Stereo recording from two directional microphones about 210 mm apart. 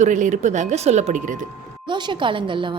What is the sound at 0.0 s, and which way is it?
Speech, 35° right (ahead or behind).